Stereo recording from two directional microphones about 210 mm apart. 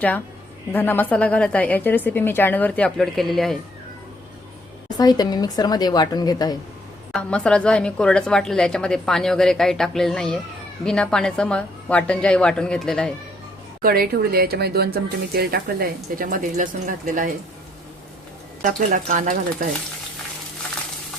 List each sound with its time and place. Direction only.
0.7 s a woman's voice: 10° left (ahead or behind)
4.9 s speech: 20° left (ahead or behind)
7.1 s a woman's voice: 5° left (ahead or behind)
13.8 s speech: 45° right (ahead or behind)
18.6 s speech: 40° right (ahead or behind)